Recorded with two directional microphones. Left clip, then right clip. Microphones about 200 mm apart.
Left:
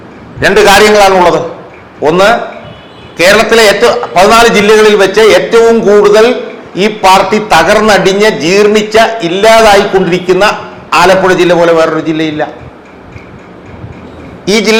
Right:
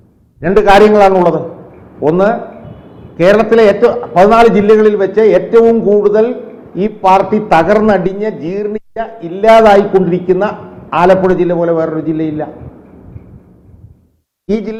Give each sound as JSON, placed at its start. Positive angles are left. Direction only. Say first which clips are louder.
{"t": 0.3, "sound": "speech", "louder": "left 3 dB", "side_deg": 15}
{"t": 2.1, "sound": "a man's voice", "louder": "left 9 dB", "side_deg": 5}
{"t": 4.2, "sound": "a man's voice", "louder": "left 2 dB", "side_deg": 25}
{"t": 4.4, "sound": "a man's voice", "louder": "left 3 dB", "side_deg": 5}
{"t": 7.0, "sound": "a man's voice", "louder": "left 3 dB", "side_deg": 25}
{"t": 7.3, "sound": "a man's voice", "louder": "left 5 dB", "side_deg": 5}
{"t": 7.5, "sound": "a man's voice", "louder": "left 3 dB", "side_deg": 20}
{"t": 7.9, "sound": "speech", "louder": "left 9 dB", "side_deg": 5}
{"t": 9.5, "sound": "a man's voice", "louder": "left 1 dB", "side_deg": 20}
{"t": 10.0, "sound": "a man's voice", "louder": "left 5 dB", "side_deg": 5}
{"t": 11.0, "sound": "speech", "louder": "left 3 dB", "side_deg": 15}
{"t": 14.4, "sound": "a man's voice", "louder": "left 10 dB", "side_deg": 5}